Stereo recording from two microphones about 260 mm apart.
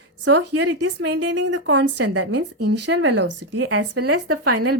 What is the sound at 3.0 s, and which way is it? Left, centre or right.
Speech, right.